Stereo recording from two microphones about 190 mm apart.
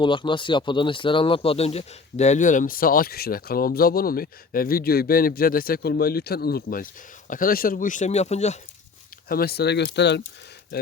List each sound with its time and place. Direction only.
0.0 s speech: 25° left (ahead or behind)
9.3 s speech: 55° left (ahead or behind)